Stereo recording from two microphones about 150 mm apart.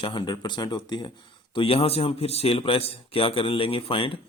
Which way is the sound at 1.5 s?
40° left (ahead or behind).